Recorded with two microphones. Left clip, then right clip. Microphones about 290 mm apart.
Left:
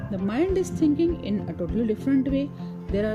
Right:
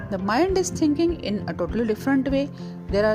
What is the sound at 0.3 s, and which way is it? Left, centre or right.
Speech, centre.